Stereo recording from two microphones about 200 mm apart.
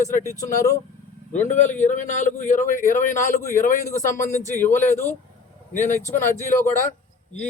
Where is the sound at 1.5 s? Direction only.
35° left (ahead or behind).